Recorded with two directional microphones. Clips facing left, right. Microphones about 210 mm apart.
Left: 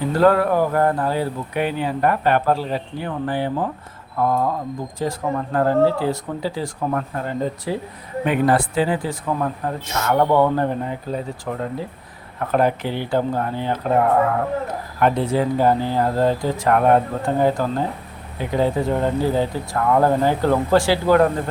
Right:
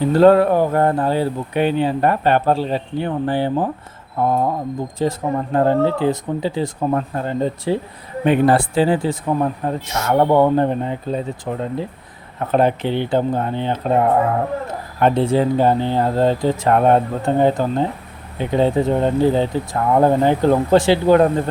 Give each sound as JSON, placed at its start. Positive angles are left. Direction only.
{"t": 0.0, "sound": "speech", "side_deg": -25}